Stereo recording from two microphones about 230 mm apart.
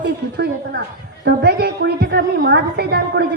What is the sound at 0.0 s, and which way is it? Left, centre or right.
A woman's voice, right.